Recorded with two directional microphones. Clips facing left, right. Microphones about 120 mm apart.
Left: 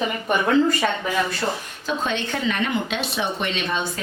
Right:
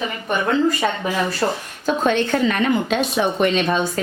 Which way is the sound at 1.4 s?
40° right (ahead or behind).